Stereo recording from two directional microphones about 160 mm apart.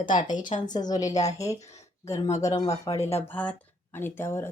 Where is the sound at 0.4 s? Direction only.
25° left (ahead or behind).